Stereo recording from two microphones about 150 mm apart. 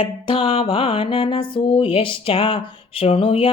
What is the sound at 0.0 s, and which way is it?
Music, 35° left (ahead or behind).